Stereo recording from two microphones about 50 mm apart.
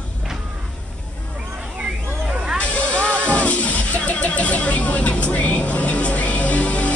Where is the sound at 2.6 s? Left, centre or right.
Left.